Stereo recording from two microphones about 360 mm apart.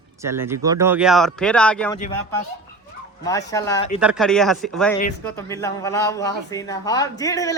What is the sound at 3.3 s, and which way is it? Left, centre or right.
Speech, centre.